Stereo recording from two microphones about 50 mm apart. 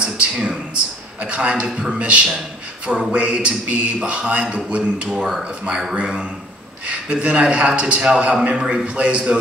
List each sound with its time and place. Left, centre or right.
0.0 s a sound: right
1.2 s a man's voice: right
4.0 s a man's voice: centre